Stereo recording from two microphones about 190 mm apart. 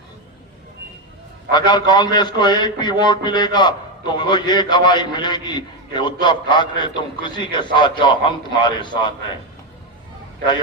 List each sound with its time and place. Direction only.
1.5 s a man's voice: 20° left (ahead or behind)